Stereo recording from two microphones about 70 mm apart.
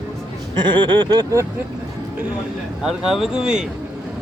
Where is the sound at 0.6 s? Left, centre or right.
Right.